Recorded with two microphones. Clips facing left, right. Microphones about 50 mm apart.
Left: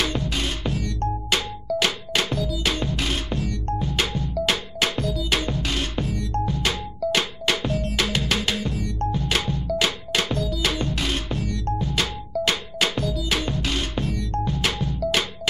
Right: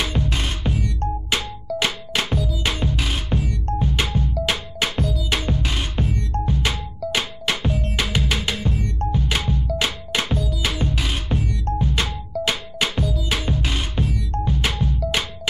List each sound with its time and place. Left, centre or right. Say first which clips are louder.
0.0 s music: even; centre
5.4 s music: right 1 dB; centre
8.5 s music: right 1 dB; right
9.1 s music: right 3 dB; centre